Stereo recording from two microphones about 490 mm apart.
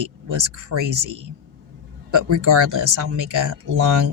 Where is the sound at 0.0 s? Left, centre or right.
Right.